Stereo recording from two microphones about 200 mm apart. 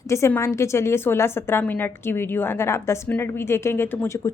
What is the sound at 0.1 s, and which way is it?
A woman's voice, 15° left (ahead or behind).